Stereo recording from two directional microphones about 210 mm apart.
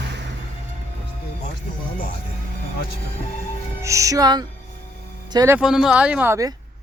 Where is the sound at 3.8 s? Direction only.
15° right (ahead or behind).